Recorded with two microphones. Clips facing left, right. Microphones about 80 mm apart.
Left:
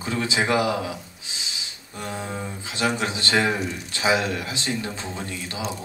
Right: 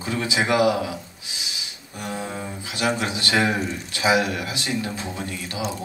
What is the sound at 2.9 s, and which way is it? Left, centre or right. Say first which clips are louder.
Speech: right 1 dB; left.